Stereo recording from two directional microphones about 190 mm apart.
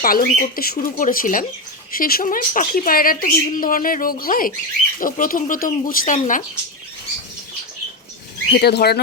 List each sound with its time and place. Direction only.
0.0 s a woman's voice: 50° left (ahead or behind)
8.5 s speech: 60° left (ahead or behind)